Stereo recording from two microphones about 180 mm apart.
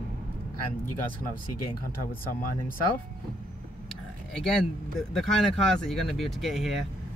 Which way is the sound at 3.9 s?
Centre (ahead or behind).